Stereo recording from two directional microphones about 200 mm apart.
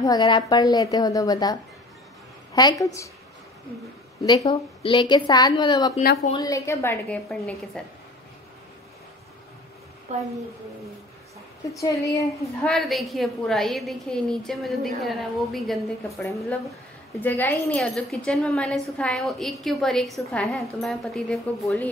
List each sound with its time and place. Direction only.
0.0 s a woman's voice: 20° left (ahead or behind)
4.4 s a woman's voice: 25° left (ahead or behind); by 7.8 s 5° left (ahead or behind)
10.1 s a woman's voice: 35° right (ahead or behind)
11.8 s a woman's voice: 15° left (ahead or behind)
12.6 s a woman's voice: centre (ahead or behind)
16.2 s a woman's voice: 15° left (ahead or behind)